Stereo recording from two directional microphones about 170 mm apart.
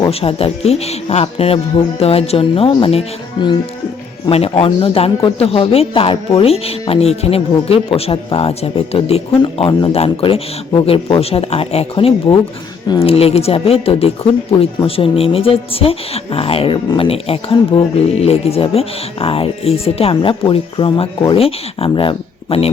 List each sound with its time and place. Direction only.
0.1 s speech: 35° left (ahead or behind)